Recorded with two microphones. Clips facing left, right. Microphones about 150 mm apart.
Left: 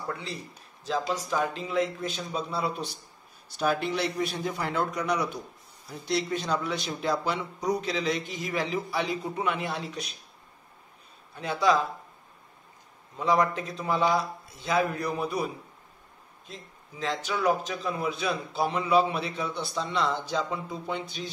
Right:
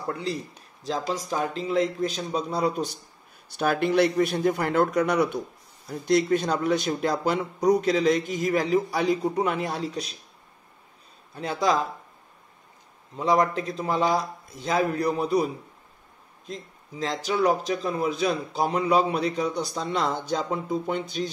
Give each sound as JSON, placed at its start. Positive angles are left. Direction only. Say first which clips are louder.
{"t": 0.1, "sound": "speech", "louder": "right 11 dB", "side_deg": -35}
{"t": 3.5, "sound": "a man's voice", "louder": "right 5 dB", "side_deg": -55}
{"t": 11.3, "sound": "speech", "louder": "even", "side_deg": -35}
{"t": 13.2, "sound": "speech", "louder": "right 2 dB", "side_deg": -35}
{"t": 16.4, "sound": "speech", "louder": "right 8 dB", "side_deg": -35}